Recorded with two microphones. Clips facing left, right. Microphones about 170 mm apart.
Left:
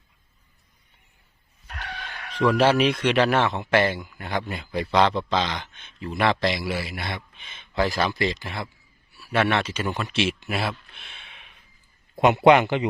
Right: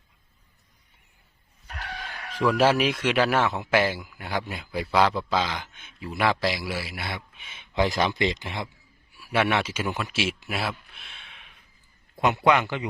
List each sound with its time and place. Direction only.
2.4 s a man's voice: centre (ahead or behind)
10.9 s a sound: centre (ahead or behind)
12.2 s a man's voice: 20° left (ahead or behind)